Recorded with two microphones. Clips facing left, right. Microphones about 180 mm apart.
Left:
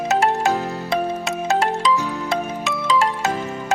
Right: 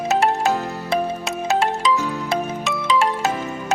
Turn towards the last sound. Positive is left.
turn(degrees=0)  # may be behind; listen again after turning